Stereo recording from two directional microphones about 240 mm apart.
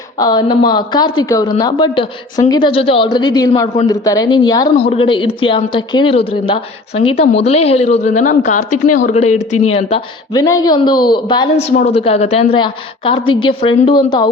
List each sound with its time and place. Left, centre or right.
0.2 s speech: centre